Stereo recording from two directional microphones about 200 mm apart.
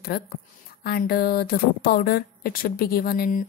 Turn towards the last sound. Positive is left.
turn(degrees=45)  # may be behind; listen again after turning